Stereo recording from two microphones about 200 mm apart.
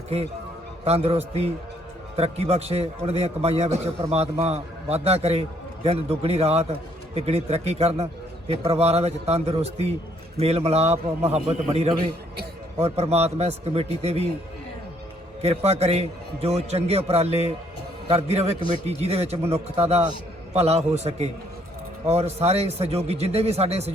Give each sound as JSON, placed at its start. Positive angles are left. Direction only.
{"t": 0.9, "sound": "a man's voice", "side_deg": -30}
{"t": 15.4, "sound": "a man's voice", "side_deg": -30}